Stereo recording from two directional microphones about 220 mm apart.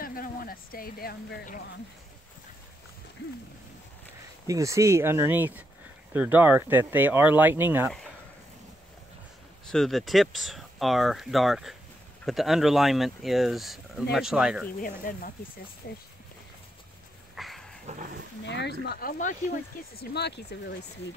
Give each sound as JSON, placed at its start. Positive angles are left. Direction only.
{"t": 0.0, "sound": "speech", "side_deg": 40}
{"t": 4.5, "sound": "speech", "side_deg": -15}
{"t": 9.7, "sound": "speech", "side_deg": 0}
{"t": 14.8, "sound": "speech", "side_deg": 40}
{"t": 17.4, "sound": "dog", "side_deg": 0}
{"t": 17.8, "sound": "speech", "side_deg": -35}
{"t": 18.4, "sound": "speech", "side_deg": 50}